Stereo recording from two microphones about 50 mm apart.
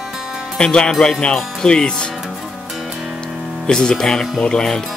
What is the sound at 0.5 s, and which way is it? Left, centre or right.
Speech, centre.